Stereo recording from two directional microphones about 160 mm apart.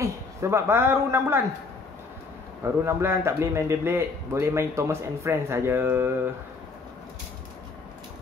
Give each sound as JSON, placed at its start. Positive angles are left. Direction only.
{"t": 0.0, "sound": "speech", "side_deg": -15}
{"t": 2.6, "sound": "a man's voice", "side_deg": -15}